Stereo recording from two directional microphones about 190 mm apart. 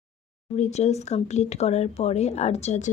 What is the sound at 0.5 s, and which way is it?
Speech, 35° left (ahead or behind).